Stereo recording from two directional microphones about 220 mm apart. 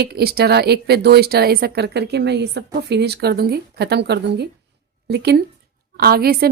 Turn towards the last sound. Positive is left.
turn(degrees=-45)  # may be behind; listen again after turning